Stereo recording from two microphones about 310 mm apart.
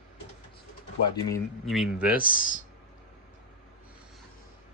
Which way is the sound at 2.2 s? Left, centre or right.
Left.